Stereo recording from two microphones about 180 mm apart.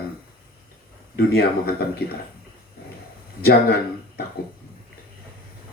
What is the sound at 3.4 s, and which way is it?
Speech, 60° left (ahead or behind).